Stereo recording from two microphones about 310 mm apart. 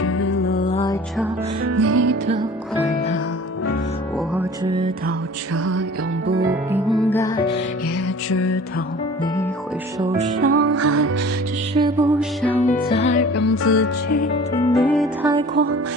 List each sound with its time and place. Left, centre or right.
0.0 s music: left
0.5 s music: centre
1.7 s music: right
6.7 s music: centre
7.1 s music: centre
8.3 s music: left
10.0 s music: centre
10.5 s music: right
11.7 s music: centre
12.9 s music: left
13.3 s music: left
14.7 s music: centre
15.5 s music: right